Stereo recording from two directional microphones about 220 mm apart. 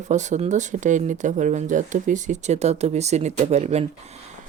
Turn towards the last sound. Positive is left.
turn(degrees=-30)  # may be behind; listen again after turning